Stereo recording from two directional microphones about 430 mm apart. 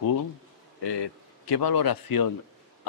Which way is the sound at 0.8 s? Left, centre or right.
Left.